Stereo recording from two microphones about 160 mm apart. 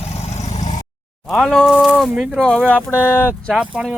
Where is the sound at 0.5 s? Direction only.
45° left (ahead or behind).